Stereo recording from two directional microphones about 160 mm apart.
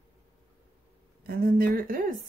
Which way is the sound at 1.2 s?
70° right (ahead or behind).